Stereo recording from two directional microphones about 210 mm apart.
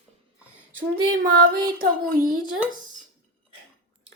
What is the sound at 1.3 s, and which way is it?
Speech, 45° right (ahead or behind).